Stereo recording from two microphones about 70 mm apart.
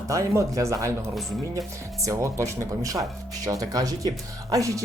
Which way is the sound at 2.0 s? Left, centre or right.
Right.